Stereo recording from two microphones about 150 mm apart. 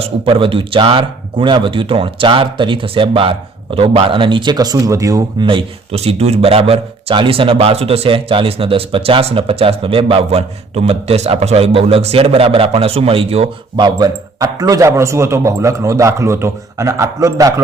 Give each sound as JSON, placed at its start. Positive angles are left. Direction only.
{"t": 0.0, "sound": "speech", "side_deg": -35}
{"t": 13.8, "sound": "speech", "side_deg": -25}